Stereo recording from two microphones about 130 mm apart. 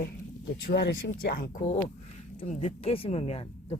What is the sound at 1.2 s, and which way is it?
Speech, 90° left.